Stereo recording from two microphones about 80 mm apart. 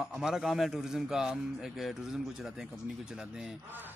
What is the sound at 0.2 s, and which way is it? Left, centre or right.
Speech, centre.